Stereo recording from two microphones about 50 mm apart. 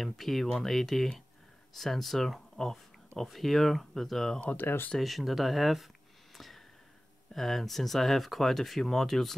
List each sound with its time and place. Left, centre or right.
0.0 s speech: centre
4.6 s speech: left
4.9 s speech: centre
6.3 s a sound: centre
7.3 s speech: centre